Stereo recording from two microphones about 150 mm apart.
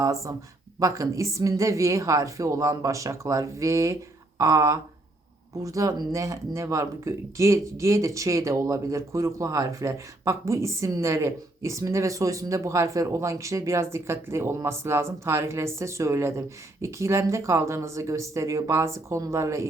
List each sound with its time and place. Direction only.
0.0 s speech: 20° right (ahead or behind)